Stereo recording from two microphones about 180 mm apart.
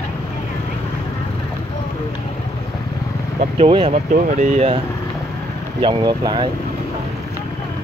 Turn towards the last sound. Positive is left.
turn(degrees=-25)  # may be behind; listen again after turning